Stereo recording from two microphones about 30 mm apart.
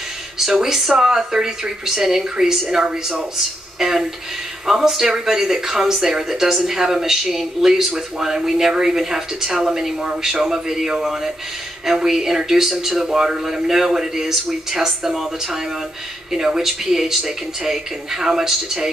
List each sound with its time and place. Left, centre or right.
0.5 s speech: right
0.7 s speech: centre